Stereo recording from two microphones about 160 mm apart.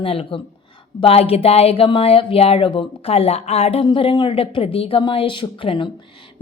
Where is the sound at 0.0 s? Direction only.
35° left (ahead or behind).